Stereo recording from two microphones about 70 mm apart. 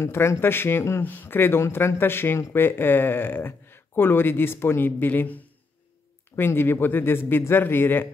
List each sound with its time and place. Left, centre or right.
0.0 s speech: left